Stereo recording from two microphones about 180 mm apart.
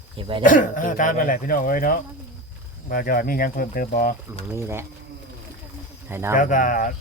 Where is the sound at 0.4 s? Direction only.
45° left (ahead or behind).